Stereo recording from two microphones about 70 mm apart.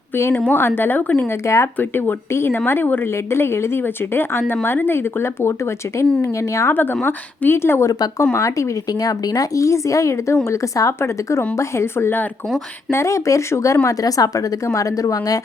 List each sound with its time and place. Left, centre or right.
0.1 s a woman's voice: left
1.3 s speech: left
1.8 s speech: left
7.0 s speech: left
7.9 s speech: left
8.3 s speech: left
8.9 s speech: left
13.8 s a woman's voice: left